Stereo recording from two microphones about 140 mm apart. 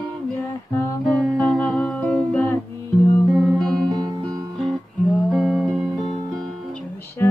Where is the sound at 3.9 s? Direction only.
25° right (ahead or behind).